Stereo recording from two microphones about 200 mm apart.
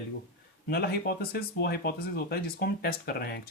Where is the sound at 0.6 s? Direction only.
50° left (ahead or behind).